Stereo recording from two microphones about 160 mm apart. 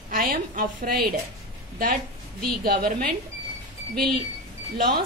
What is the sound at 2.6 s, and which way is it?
Speech, 65° right (ahead or behind).